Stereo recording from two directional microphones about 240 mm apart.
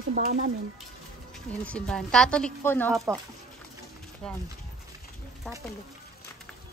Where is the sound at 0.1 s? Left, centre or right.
Right.